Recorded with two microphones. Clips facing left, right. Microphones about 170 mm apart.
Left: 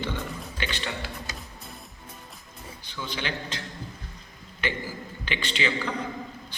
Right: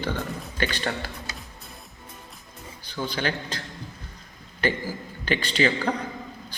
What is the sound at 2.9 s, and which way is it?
Speech, 40° right (ahead or behind).